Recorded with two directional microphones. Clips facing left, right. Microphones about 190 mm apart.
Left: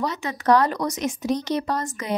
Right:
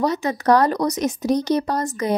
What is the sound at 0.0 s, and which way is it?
Speech, 40° right (ahead or behind).